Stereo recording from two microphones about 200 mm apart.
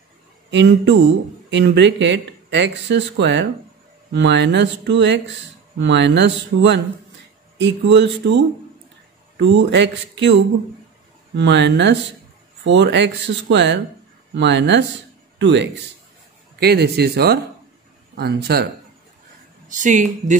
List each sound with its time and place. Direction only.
0.5 s speech: 65° right (ahead or behind)
9.4 s speech: 65° right (ahead or behind)
11.3 s speech: 60° right (ahead or behind)
19.7 s speech: 40° right (ahead or behind)